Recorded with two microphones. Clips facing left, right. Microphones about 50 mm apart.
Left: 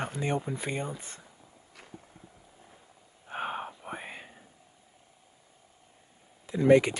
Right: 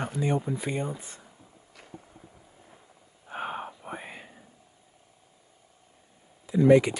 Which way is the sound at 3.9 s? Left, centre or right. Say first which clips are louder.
Right 1 dB; left.